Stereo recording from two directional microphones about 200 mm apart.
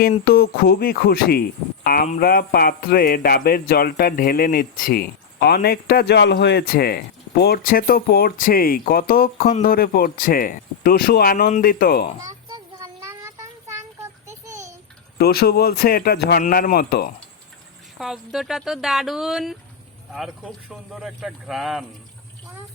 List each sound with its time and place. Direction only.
0.0 s speech: 50° left (ahead or behind)
12.5 s child singing: 15° right (ahead or behind)
15.2 s speech: 50° left (ahead or behind)
18.0 s speech: centre (ahead or behind)